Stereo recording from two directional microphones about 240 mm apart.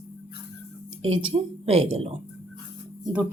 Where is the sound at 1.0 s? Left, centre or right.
Right.